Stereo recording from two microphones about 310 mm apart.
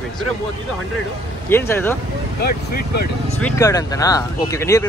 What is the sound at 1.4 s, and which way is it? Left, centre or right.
Speech, centre.